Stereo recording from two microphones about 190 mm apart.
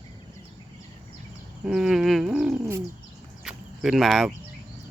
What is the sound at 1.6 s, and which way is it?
Speech, 5° right (ahead or behind).